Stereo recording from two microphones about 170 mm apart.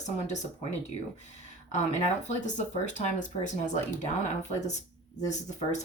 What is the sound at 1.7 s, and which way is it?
Speech, 45° left (ahead or behind).